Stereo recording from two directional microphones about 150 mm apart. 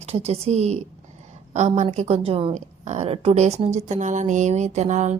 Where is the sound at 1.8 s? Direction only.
45° right (ahead or behind).